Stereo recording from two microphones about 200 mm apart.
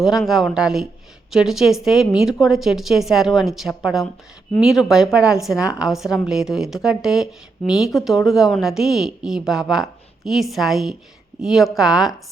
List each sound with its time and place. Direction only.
0.0 s a woman's voice: centre (ahead or behind)